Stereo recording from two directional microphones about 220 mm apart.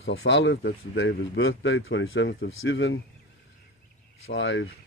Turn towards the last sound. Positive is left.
turn(degrees=60)  # may be behind; listen again after turning